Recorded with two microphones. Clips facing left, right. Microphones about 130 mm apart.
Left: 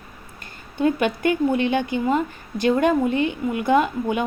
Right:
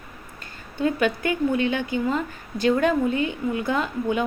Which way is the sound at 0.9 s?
25° left (ahead or behind).